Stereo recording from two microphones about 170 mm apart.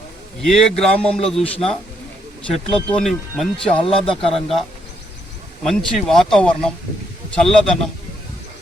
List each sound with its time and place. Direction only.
0.4 s speech: 5° left (ahead or behind)
2.5 s speech: 5° left (ahead or behind)
3.6 s speech: 30° left (ahead or behind)
4.2 s speech: centre (ahead or behind)
5.6 s speech: 5° left (ahead or behind)